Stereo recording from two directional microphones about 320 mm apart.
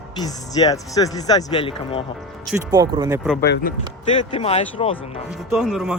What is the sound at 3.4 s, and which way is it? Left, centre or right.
Speech, left.